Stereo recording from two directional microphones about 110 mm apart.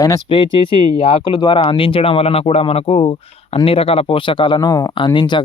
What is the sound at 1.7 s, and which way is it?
Speech, 55° left (ahead or behind).